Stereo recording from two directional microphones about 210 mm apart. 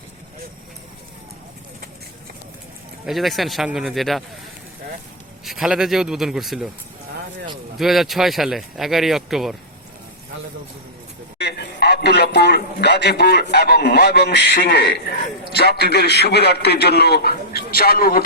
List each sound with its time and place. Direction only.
3.1 s speech: centre (ahead or behind)
5.5 s speech: centre (ahead or behind)
7.8 s speech: centre (ahead or behind)
11.3 s a man's voice: 50° left (ahead or behind)